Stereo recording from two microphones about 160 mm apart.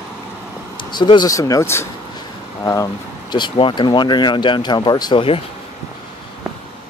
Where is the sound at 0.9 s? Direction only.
25° left (ahead or behind).